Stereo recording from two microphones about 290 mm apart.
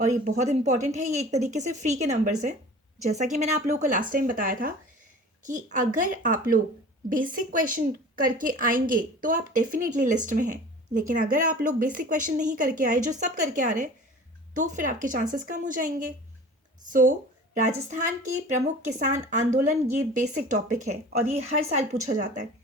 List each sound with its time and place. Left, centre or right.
0.0 s a woman's voice: right